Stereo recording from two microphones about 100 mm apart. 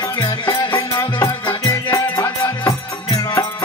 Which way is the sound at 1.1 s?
35° left (ahead or behind).